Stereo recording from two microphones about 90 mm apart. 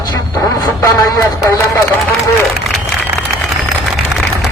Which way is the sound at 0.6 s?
45° left (ahead or behind).